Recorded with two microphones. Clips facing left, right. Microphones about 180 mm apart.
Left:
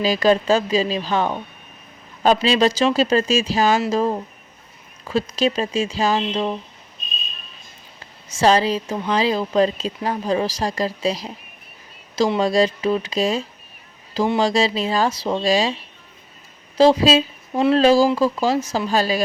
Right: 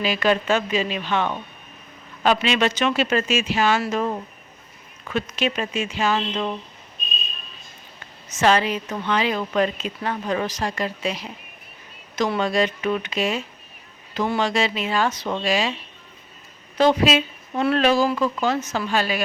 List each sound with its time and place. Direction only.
0.0 s speech: 35° left (ahead or behind)
8.4 s speech: 35° left (ahead or behind)